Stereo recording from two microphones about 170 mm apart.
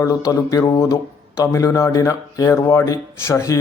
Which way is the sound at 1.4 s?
20° left (ahead or behind).